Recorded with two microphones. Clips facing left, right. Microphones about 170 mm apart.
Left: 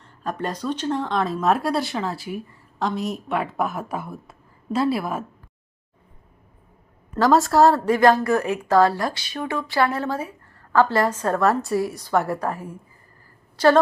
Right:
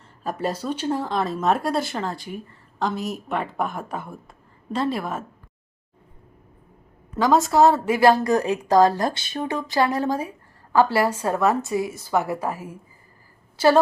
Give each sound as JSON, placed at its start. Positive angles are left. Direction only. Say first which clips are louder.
{"t": 0.2, "sound": "speech", "louder": "right 1 dB", "side_deg": -5}
{"t": 7.2, "sound": "a woman's voice", "louder": "left 1 dB", "side_deg": 0}